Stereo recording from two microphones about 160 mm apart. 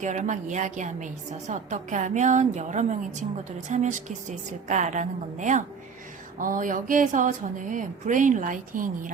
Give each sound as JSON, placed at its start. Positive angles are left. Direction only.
{"t": 0.0, "sound": "a woman's voice", "side_deg": -50}